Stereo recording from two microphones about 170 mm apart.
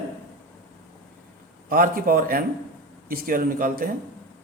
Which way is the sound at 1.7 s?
60° right (ahead or behind).